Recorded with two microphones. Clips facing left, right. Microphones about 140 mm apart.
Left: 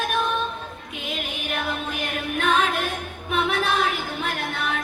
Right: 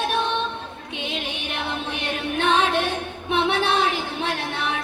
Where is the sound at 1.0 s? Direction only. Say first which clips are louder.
Left 1 dB; 30° right (ahead or behind).